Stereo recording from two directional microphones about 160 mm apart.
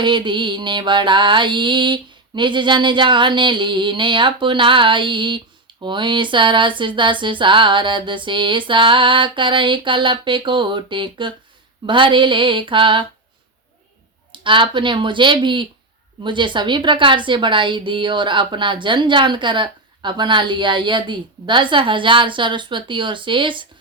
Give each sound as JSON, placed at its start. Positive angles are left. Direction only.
{"t": 0.0, "sound": "mantra", "side_deg": -30}
{"t": 14.3, "sound": "mantra", "side_deg": -30}